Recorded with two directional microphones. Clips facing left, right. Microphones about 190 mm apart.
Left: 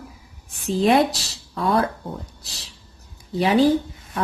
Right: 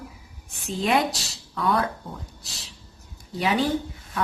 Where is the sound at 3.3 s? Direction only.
35° left (ahead or behind).